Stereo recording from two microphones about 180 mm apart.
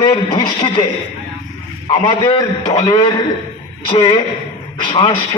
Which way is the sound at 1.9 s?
25° left (ahead or behind).